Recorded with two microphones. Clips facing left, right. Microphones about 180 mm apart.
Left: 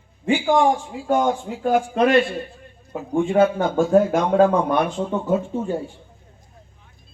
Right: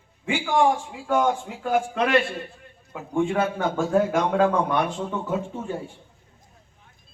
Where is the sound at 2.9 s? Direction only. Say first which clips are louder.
Left 3 dB; 25° left (ahead or behind).